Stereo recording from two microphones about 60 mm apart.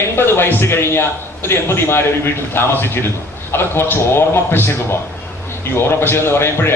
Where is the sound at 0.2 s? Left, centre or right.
Left.